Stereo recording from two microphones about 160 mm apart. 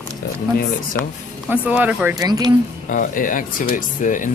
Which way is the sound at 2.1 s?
25° right (ahead or behind).